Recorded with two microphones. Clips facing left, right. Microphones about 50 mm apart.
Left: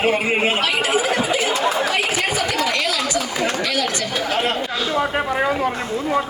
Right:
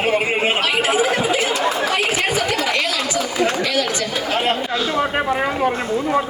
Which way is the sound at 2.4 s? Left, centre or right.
Centre.